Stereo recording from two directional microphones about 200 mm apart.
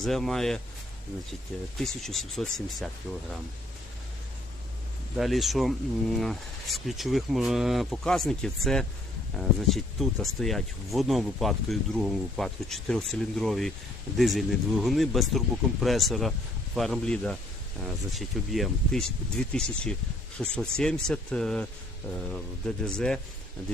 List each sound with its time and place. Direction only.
0.0 s speech: centre (ahead or behind)
1.8 s speech: centre (ahead or behind)
5.1 s speech: centre (ahead or behind)